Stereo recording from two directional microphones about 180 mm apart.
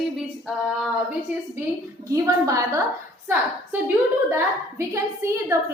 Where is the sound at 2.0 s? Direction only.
20° right (ahead or behind).